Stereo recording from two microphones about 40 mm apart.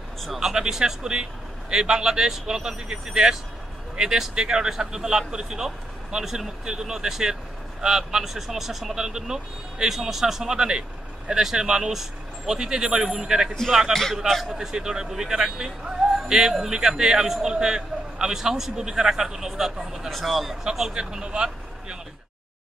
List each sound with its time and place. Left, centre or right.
0.2 s a man's voice: centre
9.8 s a man's voice: centre
14.2 s speech: centre
14.5 s a man's voice: centre
20.1 s speech: centre
20.9 s speech: right